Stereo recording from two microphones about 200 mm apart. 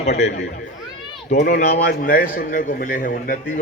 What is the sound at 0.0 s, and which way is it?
A man's voice, 35° left (ahead or behind).